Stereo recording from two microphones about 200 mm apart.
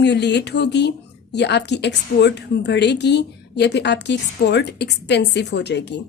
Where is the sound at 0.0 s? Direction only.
60° left (ahead or behind).